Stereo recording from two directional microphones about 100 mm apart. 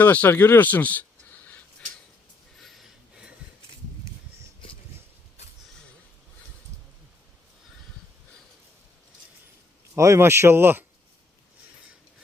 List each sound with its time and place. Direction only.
0.0 s speech: 15° left (ahead or behind)
2.6 s a sound: centre (ahead or behind)
9.9 s speech: 30° right (ahead or behind)